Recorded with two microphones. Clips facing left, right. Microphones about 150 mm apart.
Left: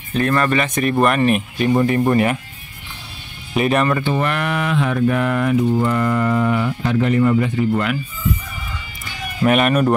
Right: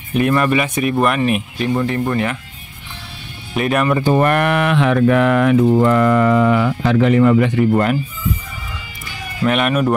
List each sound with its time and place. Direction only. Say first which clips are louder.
0.1 s speech: right 2 dB; 10° right (ahead or behind); by 2.3 s 15° left (ahead or behind)
3.5 s speech: even; centre (ahead or behind)
4.0 s speech: right 6 dB; 50° right (ahead or behind); by 7.6 s 80° right
7.7 s speech: right 4 dB; 40° right (ahead or behind)
9.5 s speech: left 1 dB; centre (ahead or behind)